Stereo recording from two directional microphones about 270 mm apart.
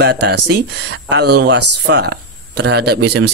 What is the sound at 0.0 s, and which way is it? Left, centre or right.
Speech, right.